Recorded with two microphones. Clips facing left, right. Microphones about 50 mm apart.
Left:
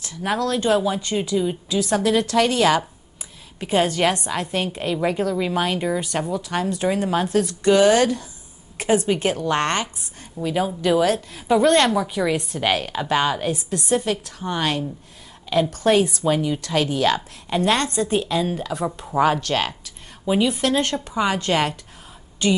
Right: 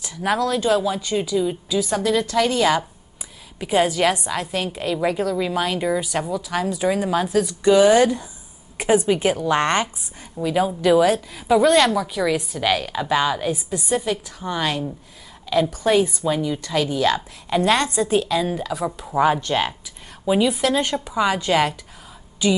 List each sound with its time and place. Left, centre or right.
0.2 s a woman's voice: centre
0.7 s a woman's voice: centre
1.7 s a woman's voice: centre
4.3 s a woman's voice: centre
7.4 s a woman's voice: centre
11.9 s a woman's voice: centre
13.5 s a woman's voice: centre
16.3 s a woman's voice: centre
17.6 s speech: centre
18.2 s a woman's voice: centre
18.5 s speech: centre
20.2 s a woman's voice: centre
20.8 s speech: centre
21.5 s a woman's voice: centre